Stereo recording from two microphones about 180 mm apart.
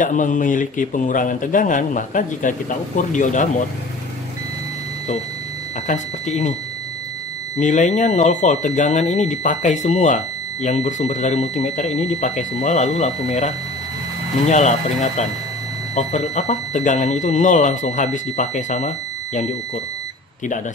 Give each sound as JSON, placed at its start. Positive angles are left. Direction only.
{"t": 0.0, "sound": "a man's voice", "side_deg": 45}
{"t": 5.9, "sound": "speech", "side_deg": 40}
{"t": 7.5, "sound": "speech", "side_deg": 40}